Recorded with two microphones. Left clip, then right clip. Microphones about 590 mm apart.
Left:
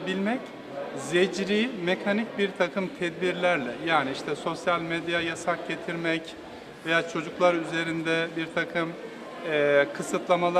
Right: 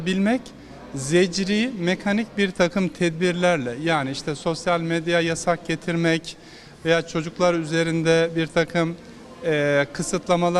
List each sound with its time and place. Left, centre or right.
0.0 s a man's voice: right